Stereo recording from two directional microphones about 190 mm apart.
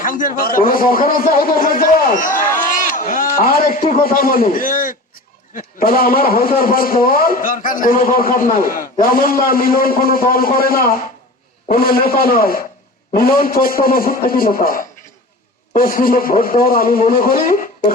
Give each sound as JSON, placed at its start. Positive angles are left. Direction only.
{"t": 0.0, "sound": "a man's voice", "side_deg": 45}